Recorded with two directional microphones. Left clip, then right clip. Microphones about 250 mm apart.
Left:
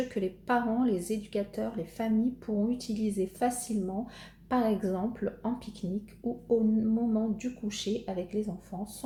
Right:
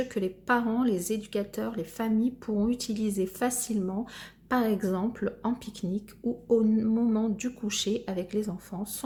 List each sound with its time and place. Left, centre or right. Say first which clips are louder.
0.1 s speech: right 2 dB; centre